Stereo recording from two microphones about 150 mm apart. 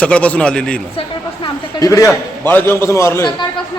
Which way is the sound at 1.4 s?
20° left (ahead or behind).